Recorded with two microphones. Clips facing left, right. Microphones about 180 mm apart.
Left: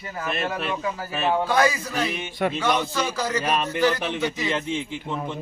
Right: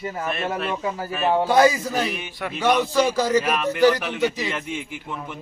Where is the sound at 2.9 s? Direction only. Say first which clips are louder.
Right 7 dB; 30° right (ahead or behind).